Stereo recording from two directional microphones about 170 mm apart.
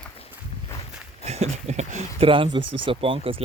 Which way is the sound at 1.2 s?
40° right (ahead or behind).